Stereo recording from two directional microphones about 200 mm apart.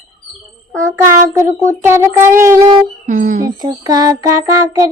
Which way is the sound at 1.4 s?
10° right (ahead or behind).